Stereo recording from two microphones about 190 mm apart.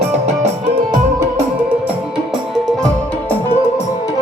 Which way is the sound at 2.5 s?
Centre (ahead or behind).